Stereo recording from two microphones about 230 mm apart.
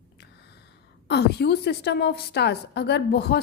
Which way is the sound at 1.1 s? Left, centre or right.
Left.